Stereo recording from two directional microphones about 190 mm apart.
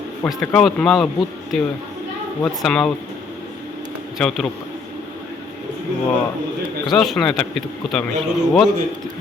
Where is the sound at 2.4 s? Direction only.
5° left (ahead or behind).